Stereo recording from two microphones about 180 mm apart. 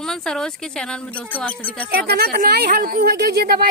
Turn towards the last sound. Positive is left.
turn(degrees=-55)  # may be behind; listen again after turning